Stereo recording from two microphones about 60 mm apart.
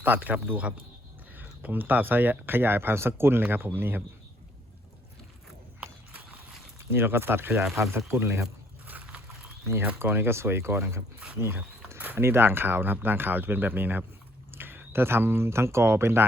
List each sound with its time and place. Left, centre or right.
0.0 s speech: right
1.4 s speech: right
6.7 s speech: right
7.8 s speech: right
8.9 s a sound: right
10.1 s speech: right
12.0 s speech: right